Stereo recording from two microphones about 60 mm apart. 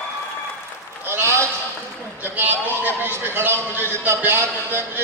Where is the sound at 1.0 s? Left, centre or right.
Right.